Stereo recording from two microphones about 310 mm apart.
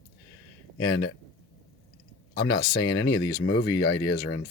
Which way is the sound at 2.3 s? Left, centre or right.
Left.